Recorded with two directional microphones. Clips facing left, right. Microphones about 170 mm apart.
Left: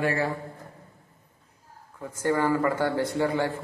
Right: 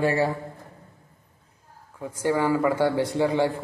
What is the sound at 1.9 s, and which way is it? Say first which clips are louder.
Speech: right 1 dB; 10° right (ahead or behind).